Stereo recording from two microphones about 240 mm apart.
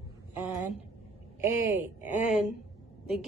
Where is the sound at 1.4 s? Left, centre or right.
Centre.